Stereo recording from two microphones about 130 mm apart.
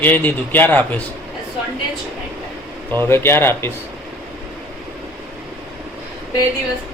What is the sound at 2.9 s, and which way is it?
Speech, 20° left (ahead or behind).